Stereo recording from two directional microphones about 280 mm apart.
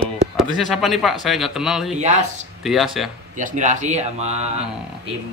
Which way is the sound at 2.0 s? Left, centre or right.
Right.